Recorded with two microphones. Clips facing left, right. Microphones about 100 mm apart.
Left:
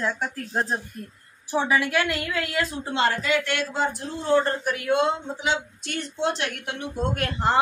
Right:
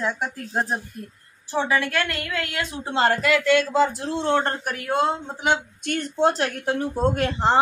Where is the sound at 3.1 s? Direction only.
75° right (ahead or behind).